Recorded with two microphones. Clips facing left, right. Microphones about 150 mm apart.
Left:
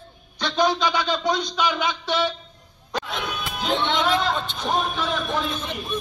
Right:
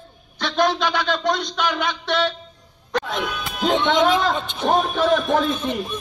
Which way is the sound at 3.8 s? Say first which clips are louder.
Right 4 dB; 50° right (ahead or behind).